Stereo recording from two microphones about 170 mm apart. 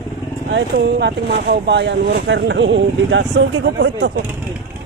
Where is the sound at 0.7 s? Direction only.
75° right (ahead or behind).